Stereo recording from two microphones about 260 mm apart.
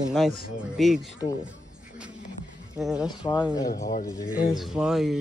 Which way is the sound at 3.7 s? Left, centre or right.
Left.